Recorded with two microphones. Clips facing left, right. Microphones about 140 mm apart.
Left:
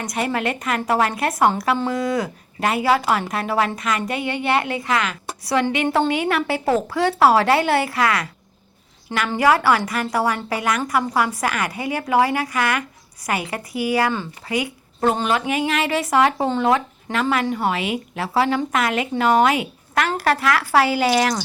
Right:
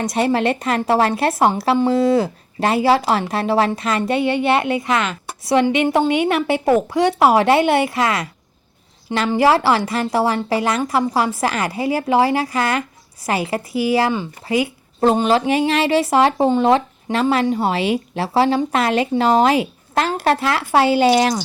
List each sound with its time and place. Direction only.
0.0 s a woman's voice: 25° right (ahead or behind)
9.4 s a woman's voice: 30° right (ahead or behind)